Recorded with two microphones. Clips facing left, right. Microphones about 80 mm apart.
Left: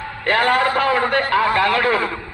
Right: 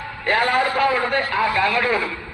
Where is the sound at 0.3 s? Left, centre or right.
Left.